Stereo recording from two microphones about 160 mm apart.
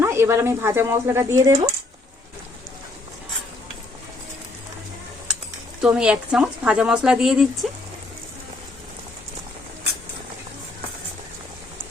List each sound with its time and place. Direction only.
0.0 s speech: 15° right (ahead or behind)
5.8 s speech: 5° right (ahead or behind)